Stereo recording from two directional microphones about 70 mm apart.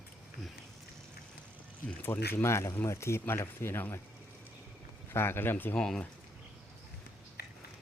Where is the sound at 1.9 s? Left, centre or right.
Left.